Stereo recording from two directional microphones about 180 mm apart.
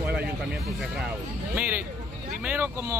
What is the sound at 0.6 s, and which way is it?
Speech, centre (ahead or behind).